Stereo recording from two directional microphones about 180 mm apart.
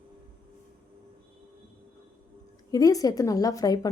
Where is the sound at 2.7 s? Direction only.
20° left (ahead or behind).